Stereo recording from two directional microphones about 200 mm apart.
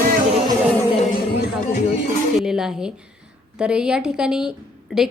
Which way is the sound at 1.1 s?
45° left (ahead or behind).